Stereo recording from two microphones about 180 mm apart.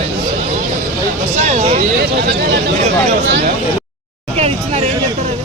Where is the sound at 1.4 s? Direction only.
35° right (ahead or behind).